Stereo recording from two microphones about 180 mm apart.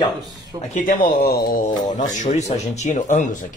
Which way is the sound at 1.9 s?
45° left (ahead or behind).